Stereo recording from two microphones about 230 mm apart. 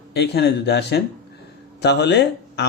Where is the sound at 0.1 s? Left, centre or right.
Left.